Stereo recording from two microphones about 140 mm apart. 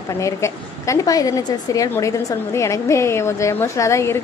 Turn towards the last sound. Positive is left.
turn(degrees=20)  # may be behind; listen again after turning